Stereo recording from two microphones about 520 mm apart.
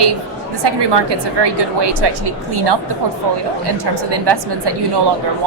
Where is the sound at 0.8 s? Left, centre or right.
Right.